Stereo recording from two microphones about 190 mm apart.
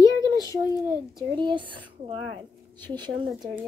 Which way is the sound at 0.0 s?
20° left (ahead or behind).